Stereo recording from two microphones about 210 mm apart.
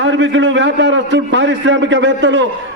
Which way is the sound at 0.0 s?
60° right (ahead or behind).